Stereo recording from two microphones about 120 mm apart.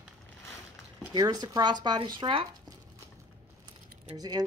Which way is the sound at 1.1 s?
35° right (ahead or behind).